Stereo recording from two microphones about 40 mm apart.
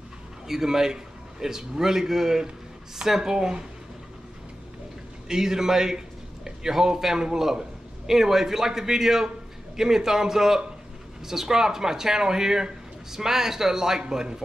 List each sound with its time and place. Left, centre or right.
0.5 s speech: centre
5.3 s a man's voice: centre